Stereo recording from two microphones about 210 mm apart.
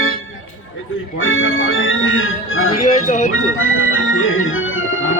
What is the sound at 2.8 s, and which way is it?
Speech, 35° left (ahead or behind).